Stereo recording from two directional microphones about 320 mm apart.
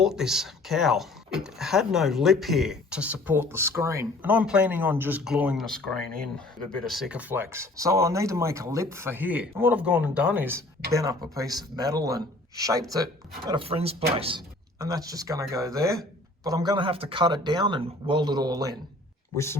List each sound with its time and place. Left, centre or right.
0.0 s speech: centre